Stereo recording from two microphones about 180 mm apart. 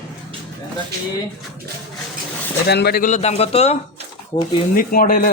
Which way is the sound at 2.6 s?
65° left (ahead or behind).